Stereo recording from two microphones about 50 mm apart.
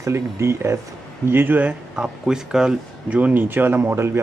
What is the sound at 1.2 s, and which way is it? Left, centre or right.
Speech, right.